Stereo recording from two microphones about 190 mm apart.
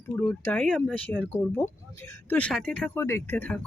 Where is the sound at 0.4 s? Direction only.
5° left (ahead or behind).